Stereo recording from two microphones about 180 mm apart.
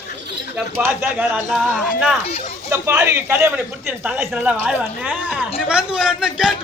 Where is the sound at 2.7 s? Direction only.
15° right (ahead or behind).